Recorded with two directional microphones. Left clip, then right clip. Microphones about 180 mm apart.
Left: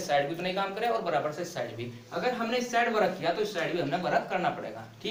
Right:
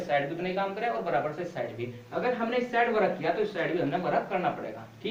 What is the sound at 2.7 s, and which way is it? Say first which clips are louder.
A man's voice: even; 30° left (ahead or behind).